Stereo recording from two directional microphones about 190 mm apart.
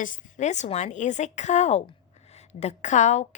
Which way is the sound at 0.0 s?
40° left (ahead or behind).